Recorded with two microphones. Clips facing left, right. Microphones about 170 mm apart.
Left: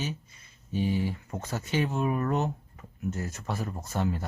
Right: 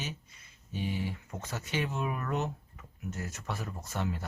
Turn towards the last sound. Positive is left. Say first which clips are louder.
# left 5 dB
turn(degrees=40)  # may be behind; listen again after turning